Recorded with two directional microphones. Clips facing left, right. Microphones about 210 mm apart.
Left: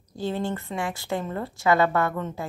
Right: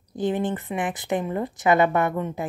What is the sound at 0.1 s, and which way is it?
A woman's voice, 20° right (ahead or behind).